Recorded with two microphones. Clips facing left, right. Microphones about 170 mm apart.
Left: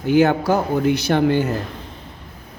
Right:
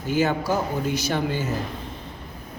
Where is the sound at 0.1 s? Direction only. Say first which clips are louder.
Left 7 dB; 65° left (ahead or behind).